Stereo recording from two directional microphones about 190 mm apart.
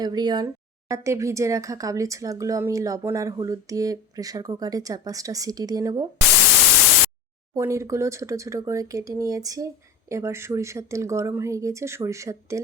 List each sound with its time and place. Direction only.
0.0 s speech: 20° right (ahead or behind)
7.5 s speech: 15° right (ahead or behind)